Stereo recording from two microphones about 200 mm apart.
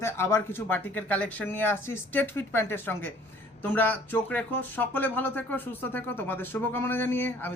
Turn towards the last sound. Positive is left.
turn(degrees=10)  # may be behind; listen again after turning